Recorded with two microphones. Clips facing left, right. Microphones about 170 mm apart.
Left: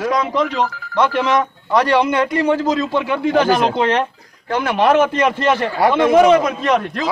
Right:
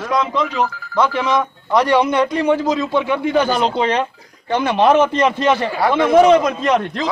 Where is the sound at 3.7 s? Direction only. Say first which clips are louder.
Left 1 dB; 15° right (ahead or behind).